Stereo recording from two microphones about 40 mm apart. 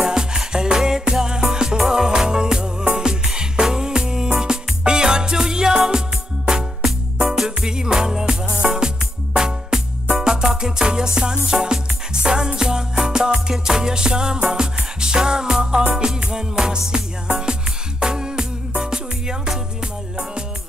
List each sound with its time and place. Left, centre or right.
0.1 s music: centre